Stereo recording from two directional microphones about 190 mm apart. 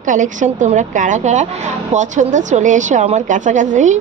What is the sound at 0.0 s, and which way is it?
A woman's voice, 40° right (ahead or behind).